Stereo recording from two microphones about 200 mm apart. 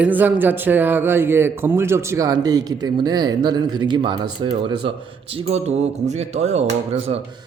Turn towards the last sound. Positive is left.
turn(degrees=-30)  # may be behind; listen again after turning